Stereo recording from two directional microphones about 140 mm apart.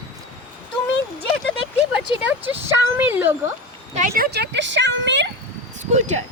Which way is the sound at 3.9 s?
75° right (ahead or behind).